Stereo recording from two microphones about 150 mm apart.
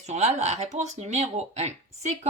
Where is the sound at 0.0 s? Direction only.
50° right (ahead or behind).